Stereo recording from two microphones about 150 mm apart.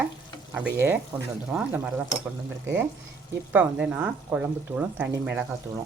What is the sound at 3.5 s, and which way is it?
Speech, 10° right (ahead or behind).